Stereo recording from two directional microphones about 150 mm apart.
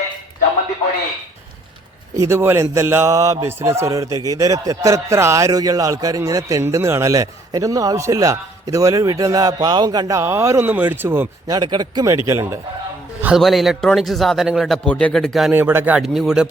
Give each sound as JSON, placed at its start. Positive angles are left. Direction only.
{"t": 2.1, "sound": "speech", "side_deg": -20}
{"t": 11.5, "sound": "speech", "side_deg": -30}
{"t": 13.2, "sound": "a man's voice", "side_deg": 0}
{"t": 15.5, "sound": "a man's voice", "side_deg": -15}